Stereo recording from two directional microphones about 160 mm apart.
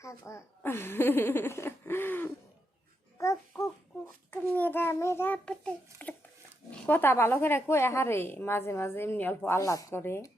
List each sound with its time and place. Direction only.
0.0 s a woman's voice: 20° left (ahead or behind)
3.2 s babbling: 20° left (ahead or behind)
4.5 s a woman's voice: 10° left (ahead or behind)